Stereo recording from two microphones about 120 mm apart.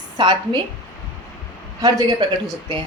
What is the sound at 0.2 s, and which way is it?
Speech, 40° right (ahead or behind).